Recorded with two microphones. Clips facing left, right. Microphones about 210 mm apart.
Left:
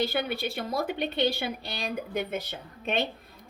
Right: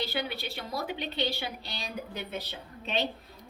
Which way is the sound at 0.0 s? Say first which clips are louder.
Left 5 dB; 50° left (ahead or behind).